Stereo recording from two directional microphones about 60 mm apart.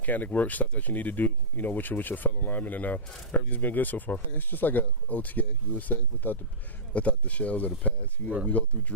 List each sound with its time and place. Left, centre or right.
0.0 s speech: left